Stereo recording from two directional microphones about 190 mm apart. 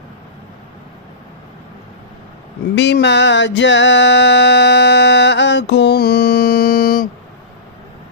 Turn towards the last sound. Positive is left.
turn(degrees=50)  # may be behind; listen again after turning